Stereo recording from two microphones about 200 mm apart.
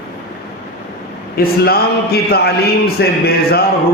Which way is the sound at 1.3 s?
50° left (ahead or behind).